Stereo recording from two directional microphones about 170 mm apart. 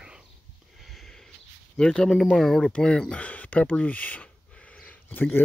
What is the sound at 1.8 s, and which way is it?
Speech, 5° left (ahead or behind).